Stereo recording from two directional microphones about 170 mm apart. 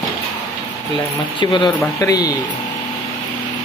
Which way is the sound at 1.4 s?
30° left (ahead or behind).